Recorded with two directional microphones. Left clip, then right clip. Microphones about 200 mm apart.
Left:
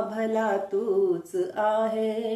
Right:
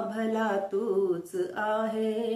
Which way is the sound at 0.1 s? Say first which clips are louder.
Left 2 dB; 10° right (ahead or behind).